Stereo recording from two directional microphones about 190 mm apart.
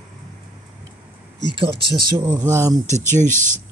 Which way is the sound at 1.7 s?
60° right (ahead or behind).